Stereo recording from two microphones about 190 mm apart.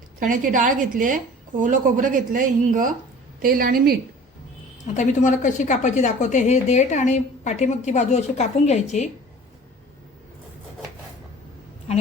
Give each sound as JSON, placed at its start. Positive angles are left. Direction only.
{"t": 0.2, "sound": "speech", "side_deg": -45}
{"t": 4.9, "sound": "a woman's voice", "side_deg": 40}